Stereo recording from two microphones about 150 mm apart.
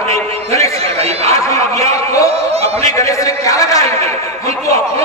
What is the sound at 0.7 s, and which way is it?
Chatter, 45° right (ahead or behind).